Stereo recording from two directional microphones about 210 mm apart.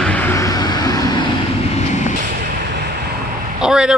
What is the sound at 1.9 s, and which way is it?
Vehicle, 35° left (ahead or behind).